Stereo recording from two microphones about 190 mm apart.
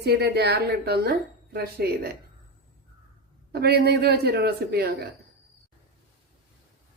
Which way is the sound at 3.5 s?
60° right (ahead or behind).